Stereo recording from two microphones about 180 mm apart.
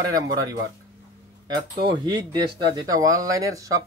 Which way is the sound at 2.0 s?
25° right (ahead or behind).